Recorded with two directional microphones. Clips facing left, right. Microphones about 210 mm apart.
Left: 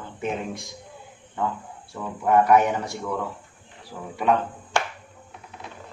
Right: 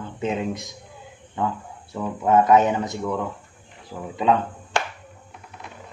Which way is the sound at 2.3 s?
20° right (ahead or behind).